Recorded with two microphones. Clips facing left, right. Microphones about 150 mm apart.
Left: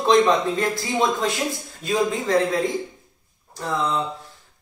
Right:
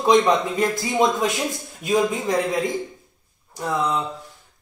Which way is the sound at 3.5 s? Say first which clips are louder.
Right 1 dB; 15° right (ahead or behind).